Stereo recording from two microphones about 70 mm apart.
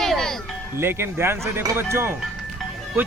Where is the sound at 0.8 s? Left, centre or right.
Right.